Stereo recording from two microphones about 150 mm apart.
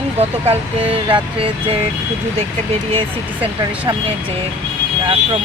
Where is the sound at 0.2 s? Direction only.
40° right (ahead or behind).